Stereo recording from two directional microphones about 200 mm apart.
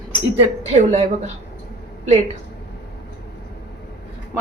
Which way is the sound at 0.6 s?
35° right (ahead or behind).